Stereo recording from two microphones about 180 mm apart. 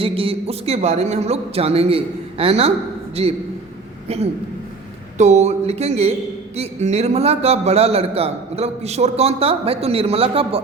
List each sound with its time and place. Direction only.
0.0 s a man's voice: 30° right (ahead or behind)
5.1 s a man's voice: 40° right (ahead or behind)